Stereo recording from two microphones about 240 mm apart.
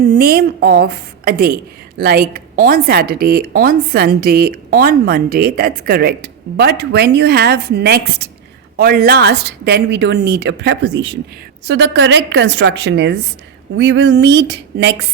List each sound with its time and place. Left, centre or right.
0.0 s a woman's voice: right